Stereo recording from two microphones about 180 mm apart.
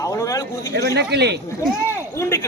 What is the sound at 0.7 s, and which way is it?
Speech, 70° right (ahead or behind).